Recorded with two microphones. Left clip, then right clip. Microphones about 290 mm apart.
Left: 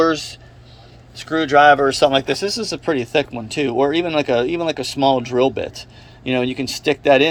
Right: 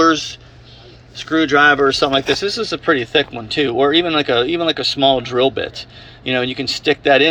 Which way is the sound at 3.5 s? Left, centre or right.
Left.